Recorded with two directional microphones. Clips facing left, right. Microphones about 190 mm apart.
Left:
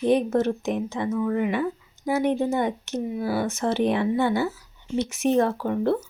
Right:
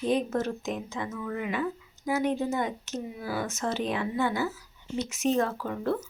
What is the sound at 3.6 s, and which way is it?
Speech, 65° left (ahead or behind).